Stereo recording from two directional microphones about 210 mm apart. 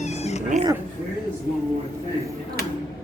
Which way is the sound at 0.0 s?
30° left (ahead or behind).